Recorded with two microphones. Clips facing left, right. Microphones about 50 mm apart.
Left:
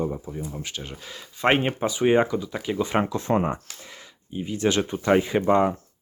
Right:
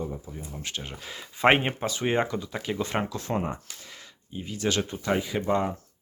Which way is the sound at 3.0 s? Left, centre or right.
Left.